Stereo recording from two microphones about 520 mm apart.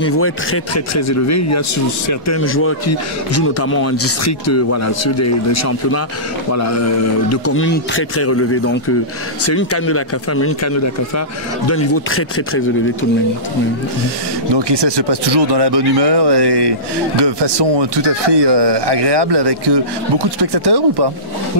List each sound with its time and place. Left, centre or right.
0.2 s speech: left
14.5 s speech: right